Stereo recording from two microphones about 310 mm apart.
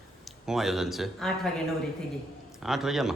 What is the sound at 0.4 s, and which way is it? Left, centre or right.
Speech, centre.